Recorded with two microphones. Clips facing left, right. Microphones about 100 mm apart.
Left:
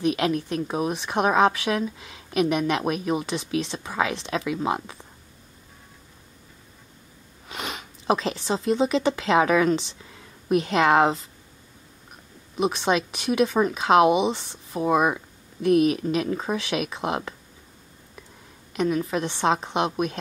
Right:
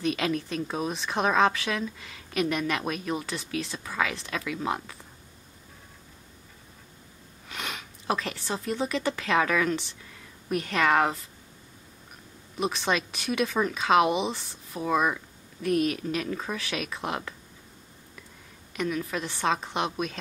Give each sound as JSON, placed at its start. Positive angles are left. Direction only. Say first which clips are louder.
{"t": 0.0, "sound": "speech", "louder": "left 4 dB", "side_deg": 15}
{"t": 7.4, "sound": "a woman's voice", "louder": "left 3 dB", "side_deg": 25}
{"t": 12.5, "sound": "a woman's voice", "louder": "left 5 dB", "side_deg": 15}
{"t": 18.8, "sound": "a woman's voice", "louder": "left 6 dB", "side_deg": 20}